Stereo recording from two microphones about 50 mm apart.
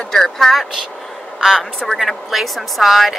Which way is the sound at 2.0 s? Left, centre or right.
Centre.